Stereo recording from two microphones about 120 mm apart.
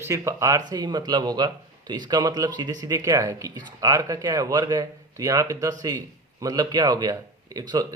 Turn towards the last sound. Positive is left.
turn(degrees=-30)  # may be behind; listen again after turning